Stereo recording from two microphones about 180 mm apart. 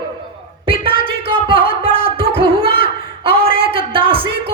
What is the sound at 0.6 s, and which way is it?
Music, 30° right (ahead or behind).